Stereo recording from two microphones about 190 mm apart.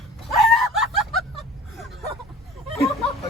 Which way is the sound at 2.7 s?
Centre (ahead or behind).